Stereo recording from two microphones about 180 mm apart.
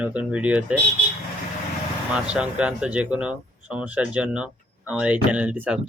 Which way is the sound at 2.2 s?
5° right (ahead or behind).